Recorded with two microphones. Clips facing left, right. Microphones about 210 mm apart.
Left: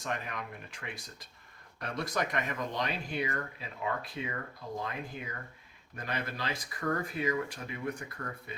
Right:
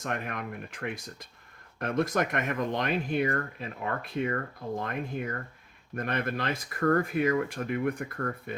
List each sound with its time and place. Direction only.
0.0 s speech: 50° right (ahead or behind)